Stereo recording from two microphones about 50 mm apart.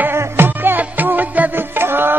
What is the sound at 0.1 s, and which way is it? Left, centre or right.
Music, right.